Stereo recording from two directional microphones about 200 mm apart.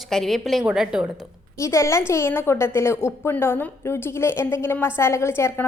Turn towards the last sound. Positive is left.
turn(degrees=15)  # may be behind; listen again after turning